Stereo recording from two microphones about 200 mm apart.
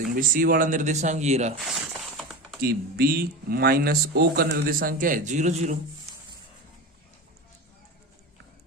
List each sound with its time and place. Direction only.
0.2 s speech: 45° right (ahead or behind)
1.5 s a sound: centre (ahead or behind)
2.6 s speech: 50° right (ahead or behind)